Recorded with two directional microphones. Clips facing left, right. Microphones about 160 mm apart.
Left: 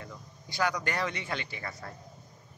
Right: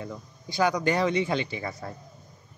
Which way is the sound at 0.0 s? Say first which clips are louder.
Right 8 dB; 20° right (ahead or behind).